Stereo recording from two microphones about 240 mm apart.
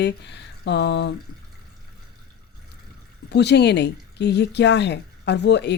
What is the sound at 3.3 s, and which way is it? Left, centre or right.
Speech, left.